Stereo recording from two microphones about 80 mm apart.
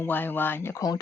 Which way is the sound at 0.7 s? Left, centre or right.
Left.